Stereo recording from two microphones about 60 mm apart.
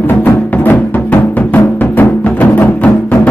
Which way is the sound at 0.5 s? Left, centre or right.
Left.